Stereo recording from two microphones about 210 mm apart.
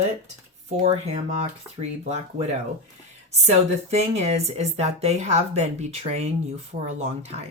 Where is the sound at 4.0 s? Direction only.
30° right (ahead or behind).